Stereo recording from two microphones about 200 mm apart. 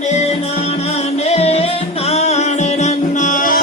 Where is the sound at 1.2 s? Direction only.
30° left (ahead or behind).